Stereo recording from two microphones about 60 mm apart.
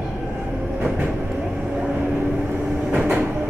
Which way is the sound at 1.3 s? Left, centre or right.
Centre.